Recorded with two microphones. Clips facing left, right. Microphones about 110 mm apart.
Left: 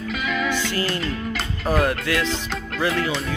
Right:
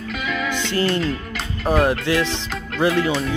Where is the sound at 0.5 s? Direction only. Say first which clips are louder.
Right 2 dB; 25° right (ahead or behind).